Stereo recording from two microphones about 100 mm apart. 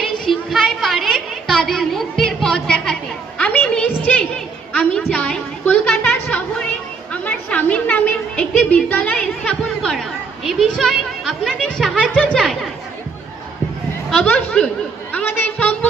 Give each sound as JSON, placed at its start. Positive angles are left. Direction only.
{"t": 0.0, "sound": "a sound", "side_deg": 0}
{"t": 14.1, "sound": "chatter", "side_deg": 10}
{"t": 15.1, "sound": "music", "side_deg": 20}